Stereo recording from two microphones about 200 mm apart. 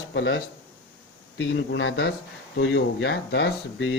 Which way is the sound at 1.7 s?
65° left (ahead or behind).